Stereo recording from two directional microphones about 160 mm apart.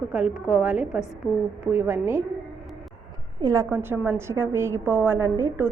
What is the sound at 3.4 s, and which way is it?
A woman's voice, 20° right (ahead or behind).